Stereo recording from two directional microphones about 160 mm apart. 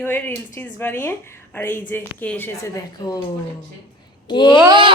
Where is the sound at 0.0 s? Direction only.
15° left (ahead or behind).